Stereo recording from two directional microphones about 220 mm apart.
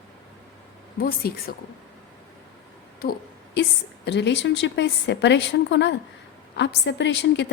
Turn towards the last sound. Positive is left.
turn(degrees=50)  # may be behind; listen again after turning